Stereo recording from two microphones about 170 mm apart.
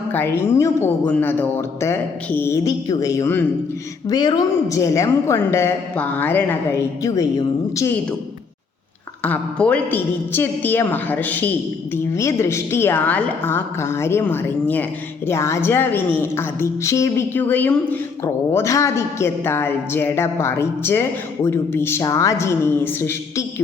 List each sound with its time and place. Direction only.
0.1 s a woman's voice: 15° left (ahead or behind)
9.2 s a woman's voice: 5° left (ahead or behind)